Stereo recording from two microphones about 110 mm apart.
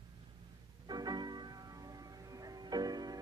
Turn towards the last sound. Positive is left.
turn(degrees=-35)  # may be behind; listen again after turning